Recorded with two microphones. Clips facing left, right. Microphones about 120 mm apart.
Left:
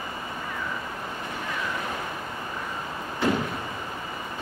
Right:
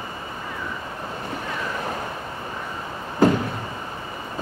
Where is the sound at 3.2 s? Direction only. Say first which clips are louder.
Right 7 dB; 40° right (ahead or behind).